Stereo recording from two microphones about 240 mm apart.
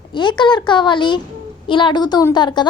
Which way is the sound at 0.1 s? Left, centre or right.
Centre.